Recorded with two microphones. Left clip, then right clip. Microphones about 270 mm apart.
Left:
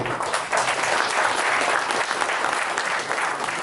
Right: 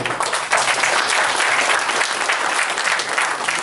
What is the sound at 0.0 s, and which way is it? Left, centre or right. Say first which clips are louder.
Applause: right 4 dB; centre.